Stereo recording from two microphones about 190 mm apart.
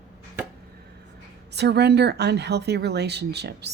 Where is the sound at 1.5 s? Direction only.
60° right (ahead or behind).